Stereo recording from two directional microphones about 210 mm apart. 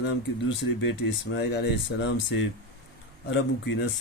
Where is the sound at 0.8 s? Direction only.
60° left (ahead or behind).